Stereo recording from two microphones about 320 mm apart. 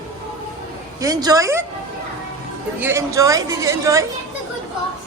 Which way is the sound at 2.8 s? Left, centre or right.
Centre.